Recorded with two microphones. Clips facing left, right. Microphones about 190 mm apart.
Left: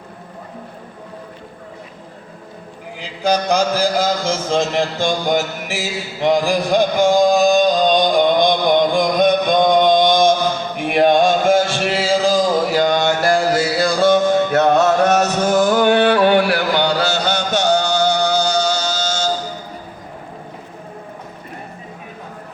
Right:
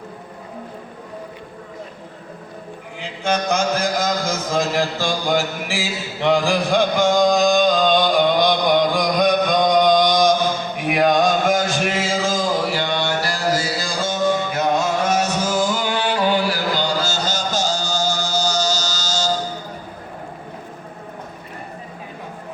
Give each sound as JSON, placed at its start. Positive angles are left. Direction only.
{"t": 3.0, "sound": "speech", "side_deg": 35}
{"t": 7.1, "sound": "music", "side_deg": 35}
{"t": 8.7, "sound": "chant", "side_deg": 25}
{"t": 10.8, "sound": "a sound", "side_deg": 25}